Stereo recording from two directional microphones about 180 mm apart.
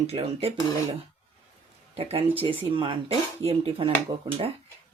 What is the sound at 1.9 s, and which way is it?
Speech, 35° right (ahead or behind).